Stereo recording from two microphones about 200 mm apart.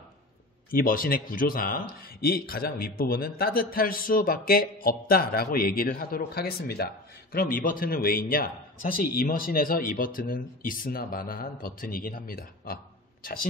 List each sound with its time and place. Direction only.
0.7 s speech: 45° left (ahead or behind)